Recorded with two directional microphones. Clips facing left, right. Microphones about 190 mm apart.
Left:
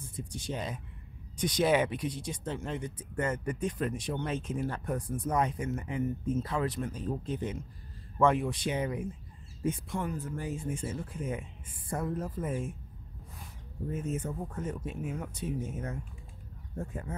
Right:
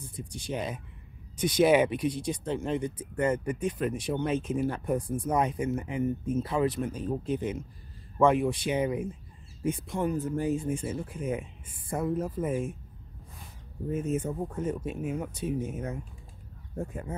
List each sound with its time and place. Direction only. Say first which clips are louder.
0.3 s speech: right 4 dB; 10° right (ahead or behind)
13.9 s speech: right 6 dB; 15° right (ahead or behind)